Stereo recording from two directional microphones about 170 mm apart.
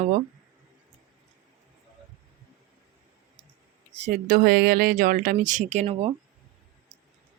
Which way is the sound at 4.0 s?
50° right (ahead or behind).